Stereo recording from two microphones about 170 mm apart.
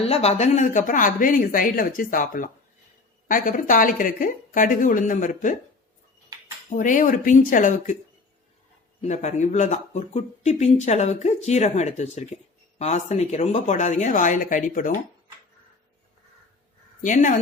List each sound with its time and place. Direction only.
0.0 s speech: 35° left (ahead or behind)
6.7 s speech: 50° left (ahead or behind)
9.0 s speech: 45° left (ahead or behind)
17.0 s speech: 45° left (ahead or behind)